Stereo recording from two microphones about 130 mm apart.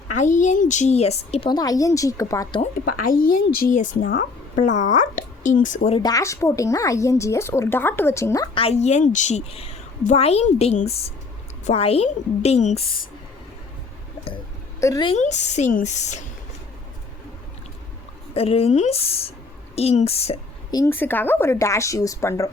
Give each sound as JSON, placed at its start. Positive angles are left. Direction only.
{"t": 0.2, "sound": "speech", "side_deg": 70}
{"t": 1.5, "sound": "speech", "side_deg": 30}
{"t": 3.1, "sound": "a woman's voice", "side_deg": 90}
{"t": 4.5, "sound": "speech", "side_deg": 75}
{"t": 6.0, "sound": "speech", "side_deg": 30}
{"t": 8.5, "sound": "a woman's voice", "side_deg": 55}
{"t": 14.8, "sound": "a woman's voice", "side_deg": 25}
{"t": 15.1, "sound": "a woman's voice", "side_deg": 60}
{"t": 18.3, "sound": "a woman's voice", "side_deg": 50}
{"t": 20.7, "sound": "a woman's voice", "side_deg": 30}
{"t": 20.9, "sound": "speech", "side_deg": 15}